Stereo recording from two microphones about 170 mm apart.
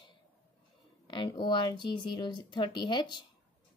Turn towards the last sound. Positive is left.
turn(degrees=25)  # may be behind; listen again after turning